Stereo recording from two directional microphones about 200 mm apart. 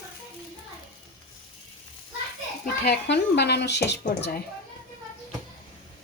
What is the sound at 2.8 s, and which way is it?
Speech, 55° left (ahead or behind).